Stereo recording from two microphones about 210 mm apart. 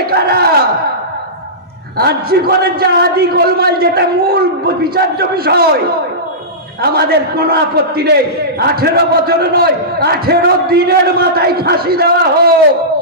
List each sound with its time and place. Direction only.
0.0 s a sound: 50° right (ahead or behind)
2.0 s a man's voice: 45° right (ahead or behind)
6.8 s a man's voice: 50° right (ahead or behind)